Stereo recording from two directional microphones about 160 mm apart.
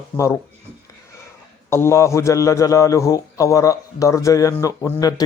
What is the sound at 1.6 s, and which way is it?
A man's voice, 15° left (ahead or behind).